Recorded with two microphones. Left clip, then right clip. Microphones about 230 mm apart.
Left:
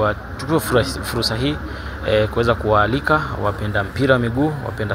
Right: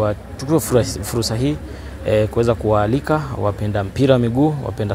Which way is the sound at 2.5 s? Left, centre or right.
Right.